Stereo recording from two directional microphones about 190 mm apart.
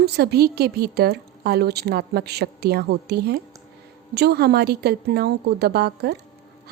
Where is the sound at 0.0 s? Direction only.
60° right (ahead or behind).